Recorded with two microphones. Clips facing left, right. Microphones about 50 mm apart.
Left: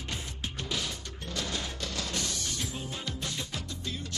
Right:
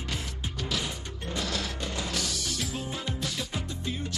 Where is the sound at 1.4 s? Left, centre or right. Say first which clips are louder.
Right 3 dB; centre.